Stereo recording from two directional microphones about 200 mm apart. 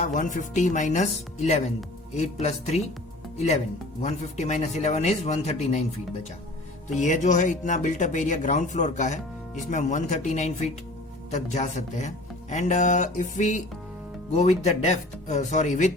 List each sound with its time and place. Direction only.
0.0 s speech: 40° left (ahead or behind)
6.8 s speech: 35° left (ahead or behind)